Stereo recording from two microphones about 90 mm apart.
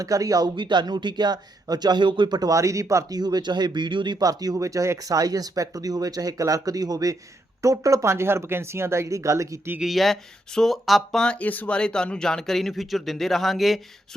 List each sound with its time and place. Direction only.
0.0 s speech: 40° right (ahead or behind)
0.5 s speech: 60° right (ahead or behind)
2.5 s speech: 35° right (ahead or behind); by 4.2 s 60° right (ahead or behind)
4.2 s speech: 45° right (ahead or behind)
9.8 s speech: centre (ahead or behind)